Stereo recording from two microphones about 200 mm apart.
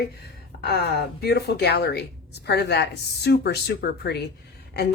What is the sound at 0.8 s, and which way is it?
A woman's voice, 55° left (ahead or behind).